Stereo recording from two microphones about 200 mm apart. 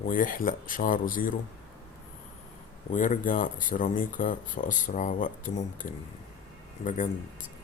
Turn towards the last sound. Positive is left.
turn(degrees=40)  # may be behind; listen again after turning